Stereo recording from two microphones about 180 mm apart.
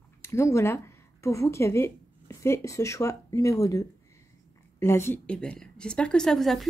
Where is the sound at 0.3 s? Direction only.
15° left (ahead or behind).